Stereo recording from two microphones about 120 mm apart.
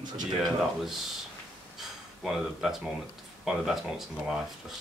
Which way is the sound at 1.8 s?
5° right (ahead or behind).